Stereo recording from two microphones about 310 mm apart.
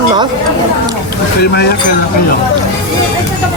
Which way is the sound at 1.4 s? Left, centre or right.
Left.